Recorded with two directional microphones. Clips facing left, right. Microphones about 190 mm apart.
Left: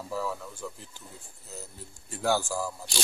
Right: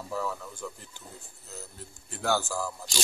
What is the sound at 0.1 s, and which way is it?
Speech, 5° left (ahead or behind).